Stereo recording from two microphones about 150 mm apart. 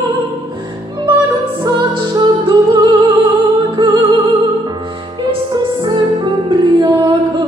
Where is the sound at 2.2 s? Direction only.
30° right (ahead or behind).